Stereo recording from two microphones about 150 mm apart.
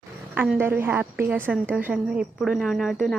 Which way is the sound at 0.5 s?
15° right (ahead or behind).